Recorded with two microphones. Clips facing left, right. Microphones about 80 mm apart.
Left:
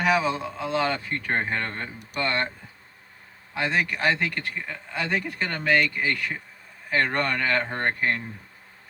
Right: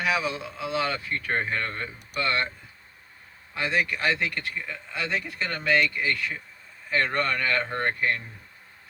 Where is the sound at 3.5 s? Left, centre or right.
Left.